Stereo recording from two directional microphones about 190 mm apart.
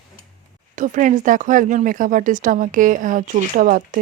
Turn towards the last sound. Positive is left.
turn(degrees=-45)  # may be behind; listen again after turning